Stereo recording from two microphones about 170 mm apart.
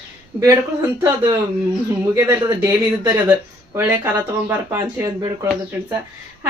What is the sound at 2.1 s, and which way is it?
Speech, 15° right (ahead or behind).